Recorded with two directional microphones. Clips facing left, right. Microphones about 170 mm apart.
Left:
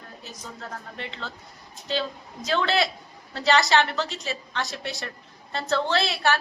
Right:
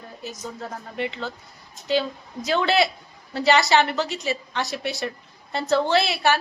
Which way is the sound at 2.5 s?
10° right (ahead or behind).